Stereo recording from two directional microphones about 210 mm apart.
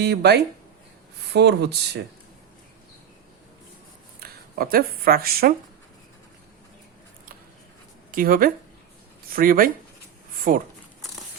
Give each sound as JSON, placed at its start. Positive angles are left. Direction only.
{"t": 0.0, "sound": "speech", "side_deg": -50}
{"t": 4.2, "sound": "speech", "side_deg": -45}
{"t": 8.1, "sound": "speech", "side_deg": -45}